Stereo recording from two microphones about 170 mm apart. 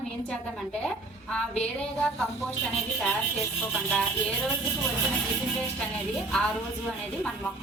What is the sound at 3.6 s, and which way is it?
Speech, 10° left (ahead or behind).